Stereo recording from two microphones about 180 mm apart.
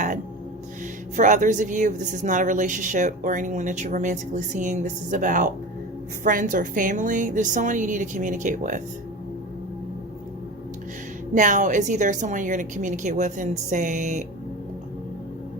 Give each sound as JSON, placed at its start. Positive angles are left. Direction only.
{"t": 1.1, "sound": "speech", "side_deg": -45}
{"t": 11.3, "sound": "speech", "side_deg": -45}